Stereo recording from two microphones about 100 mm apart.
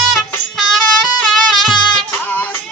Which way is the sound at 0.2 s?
Centre (ahead or behind).